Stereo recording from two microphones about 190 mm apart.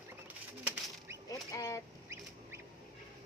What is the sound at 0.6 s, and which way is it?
Pigeon, 10° right (ahead or behind).